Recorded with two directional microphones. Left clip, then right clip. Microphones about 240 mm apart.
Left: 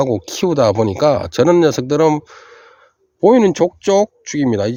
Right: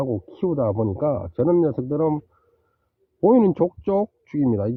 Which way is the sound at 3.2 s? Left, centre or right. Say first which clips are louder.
Left 6 dB; centre.